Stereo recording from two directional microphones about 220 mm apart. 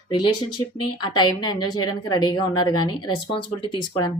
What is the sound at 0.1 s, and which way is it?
Speech, 20° left (ahead or behind).